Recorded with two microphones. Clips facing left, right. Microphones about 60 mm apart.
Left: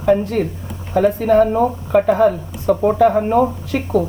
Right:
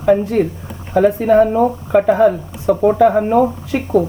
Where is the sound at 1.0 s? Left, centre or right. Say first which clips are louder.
Right 2 dB; centre.